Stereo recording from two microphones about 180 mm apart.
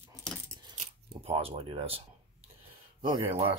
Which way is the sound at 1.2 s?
35° right (ahead or behind).